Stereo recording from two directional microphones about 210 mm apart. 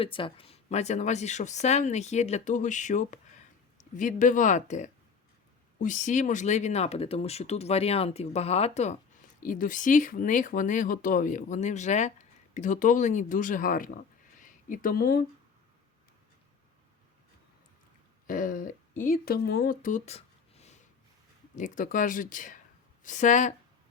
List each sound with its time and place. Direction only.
0.0 s speech: 25° left (ahead or behind); by 13.9 s 40° left (ahead or behind)
14.3 s a sound: 40° left (ahead or behind)
18.3 s speech: 40° left (ahead or behind)